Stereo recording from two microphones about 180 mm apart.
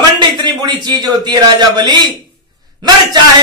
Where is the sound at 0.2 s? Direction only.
25° right (ahead or behind).